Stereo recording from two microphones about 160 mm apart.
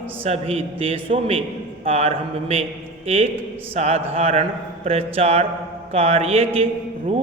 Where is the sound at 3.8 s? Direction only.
40° right (ahead or behind).